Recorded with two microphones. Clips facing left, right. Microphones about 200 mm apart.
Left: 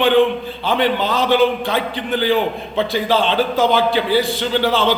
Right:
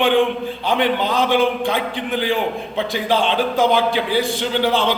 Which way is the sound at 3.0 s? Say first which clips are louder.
Right 1 dB; 15° right (ahead or behind).